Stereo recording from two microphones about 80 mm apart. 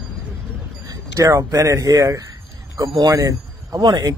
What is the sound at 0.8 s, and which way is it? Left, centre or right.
Vehicle, right.